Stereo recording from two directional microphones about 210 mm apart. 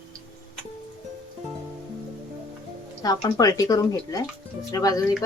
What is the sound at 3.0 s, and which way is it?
Speech, 15° left (ahead or behind).